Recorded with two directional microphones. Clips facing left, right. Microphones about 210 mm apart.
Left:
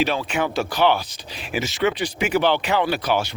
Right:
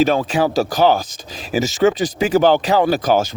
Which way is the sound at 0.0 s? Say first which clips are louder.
Right 6 dB; 45° right (ahead or behind).